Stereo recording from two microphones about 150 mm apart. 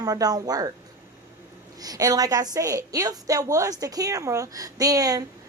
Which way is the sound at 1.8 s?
25° right (ahead or behind).